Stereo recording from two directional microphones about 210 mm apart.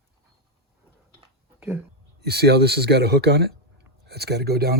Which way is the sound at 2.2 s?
50° right (ahead or behind).